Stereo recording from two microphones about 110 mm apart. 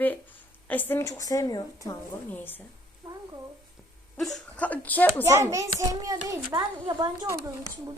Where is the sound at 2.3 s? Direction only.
15° left (ahead or behind).